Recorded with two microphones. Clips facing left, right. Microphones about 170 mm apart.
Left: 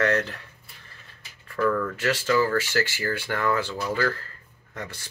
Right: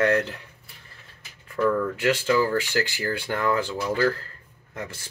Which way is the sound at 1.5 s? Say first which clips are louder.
Right 1 dB; 15° right (ahead or behind).